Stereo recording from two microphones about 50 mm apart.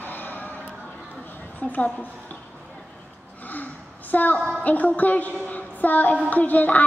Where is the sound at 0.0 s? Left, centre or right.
Left.